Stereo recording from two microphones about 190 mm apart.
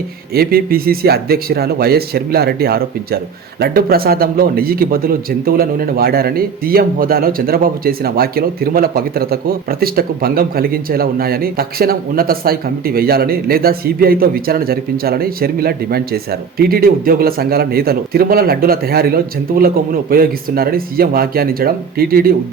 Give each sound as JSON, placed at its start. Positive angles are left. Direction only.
{"t": 0.3, "sound": "a man's voice", "side_deg": -50}